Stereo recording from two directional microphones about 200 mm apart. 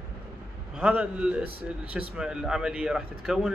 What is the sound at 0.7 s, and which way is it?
A man's voice, 5° right (ahead or behind).